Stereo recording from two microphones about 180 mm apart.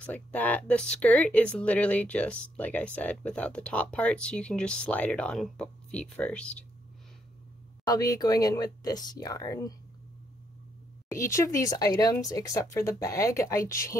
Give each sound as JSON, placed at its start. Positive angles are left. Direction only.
{"t": 0.0, "sound": "speech", "side_deg": 10}
{"t": 7.8, "sound": "speech", "side_deg": 20}
{"t": 11.1, "sound": "speech", "side_deg": 15}